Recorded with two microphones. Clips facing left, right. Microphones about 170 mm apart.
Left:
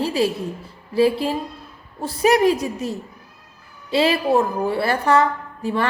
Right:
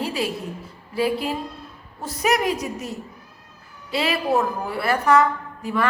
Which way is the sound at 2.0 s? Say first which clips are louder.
Left 6 dB; 30° left (ahead or behind).